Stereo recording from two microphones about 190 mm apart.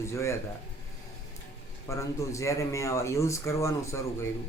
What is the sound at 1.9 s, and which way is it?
Speech, 15° left (ahead or behind).